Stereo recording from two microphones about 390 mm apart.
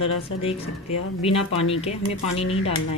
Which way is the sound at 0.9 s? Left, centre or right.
Left.